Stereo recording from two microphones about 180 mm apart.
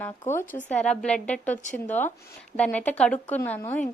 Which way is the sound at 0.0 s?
10° left (ahead or behind).